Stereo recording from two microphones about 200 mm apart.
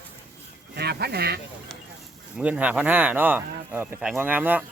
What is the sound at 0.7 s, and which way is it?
Speech, 50° right (ahead or behind).